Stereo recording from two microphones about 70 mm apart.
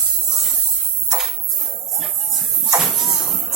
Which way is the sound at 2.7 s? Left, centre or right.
Centre.